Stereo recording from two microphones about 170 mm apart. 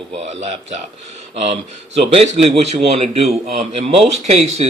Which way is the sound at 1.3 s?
40° right (ahead or behind).